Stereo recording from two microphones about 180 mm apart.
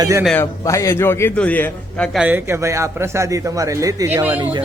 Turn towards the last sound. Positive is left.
turn(degrees=-10)  # may be behind; listen again after turning